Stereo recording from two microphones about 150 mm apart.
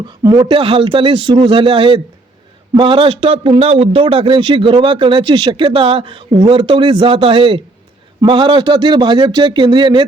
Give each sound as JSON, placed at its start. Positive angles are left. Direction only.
{"t": 0.2, "sound": "speech", "side_deg": -25}
{"t": 0.4, "sound": "a man's voice", "side_deg": -40}